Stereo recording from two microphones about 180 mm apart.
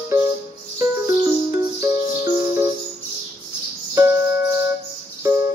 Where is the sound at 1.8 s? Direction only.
15° right (ahead or behind).